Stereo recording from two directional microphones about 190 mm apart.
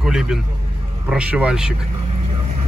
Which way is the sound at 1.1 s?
5° right (ahead or behind).